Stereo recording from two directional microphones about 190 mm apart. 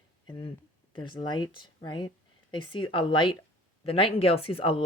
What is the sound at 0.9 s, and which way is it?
Speech, 25° left (ahead or behind).